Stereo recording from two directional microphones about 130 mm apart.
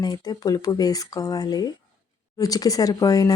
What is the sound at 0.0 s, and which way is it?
Speech, 30° left (ahead or behind).